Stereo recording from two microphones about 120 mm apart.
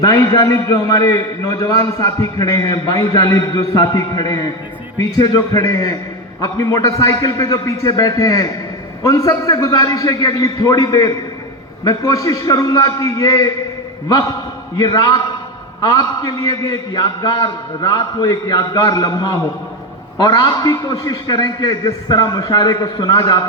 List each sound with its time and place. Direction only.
0.0 s a man's voice: 25° left (ahead or behind)